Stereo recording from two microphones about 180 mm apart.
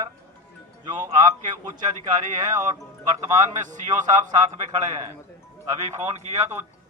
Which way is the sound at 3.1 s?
15° right (ahead or behind).